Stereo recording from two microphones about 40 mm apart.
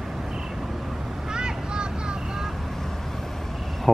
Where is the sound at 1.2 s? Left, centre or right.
Right.